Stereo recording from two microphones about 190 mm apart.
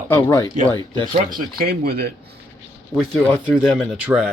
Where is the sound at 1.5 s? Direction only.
50° right (ahead or behind).